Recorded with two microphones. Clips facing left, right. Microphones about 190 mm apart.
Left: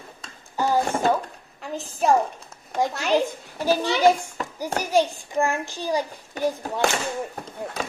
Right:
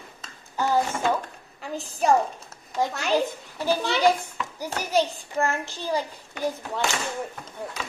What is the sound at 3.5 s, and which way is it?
Speech, 15° left (ahead or behind).